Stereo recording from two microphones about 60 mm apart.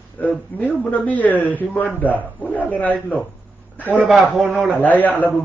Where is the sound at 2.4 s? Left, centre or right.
Left.